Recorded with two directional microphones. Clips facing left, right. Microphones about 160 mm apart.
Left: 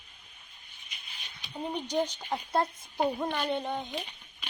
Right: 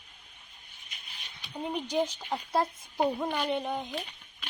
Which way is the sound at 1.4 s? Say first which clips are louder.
Right 1 dB; centre (ahead or behind).